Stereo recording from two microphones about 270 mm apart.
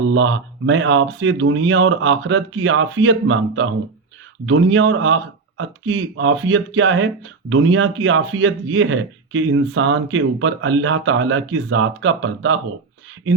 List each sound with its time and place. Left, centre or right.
0.1 s speech: right